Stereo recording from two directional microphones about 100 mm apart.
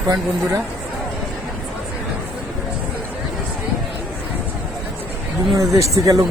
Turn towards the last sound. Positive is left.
turn(degrees=-35)  # may be behind; listen again after turning